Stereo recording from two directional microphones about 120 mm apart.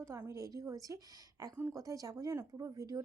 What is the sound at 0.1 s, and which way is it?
A woman's voice, 25° right (ahead or behind).